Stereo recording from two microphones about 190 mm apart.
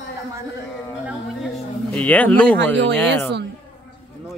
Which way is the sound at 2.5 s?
65° right (ahead or behind).